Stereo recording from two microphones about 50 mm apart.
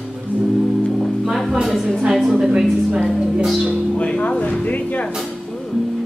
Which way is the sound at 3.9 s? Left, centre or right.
Left.